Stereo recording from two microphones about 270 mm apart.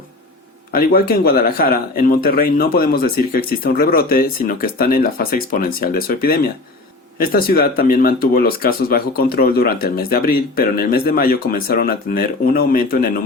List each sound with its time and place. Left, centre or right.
0.7 s speech: left